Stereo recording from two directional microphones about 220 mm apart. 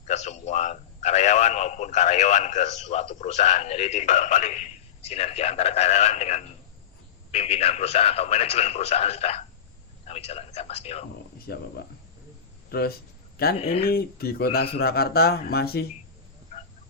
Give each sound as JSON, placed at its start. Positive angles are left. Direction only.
{"t": 0.1, "sound": "a man's voice", "side_deg": 30}
{"t": 11.4, "sound": "speech", "side_deg": 45}
{"t": 13.6, "sound": "a man's voice", "side_deg": 30}
{"t": 13.8, "sound": "speech", "side_deg": 45}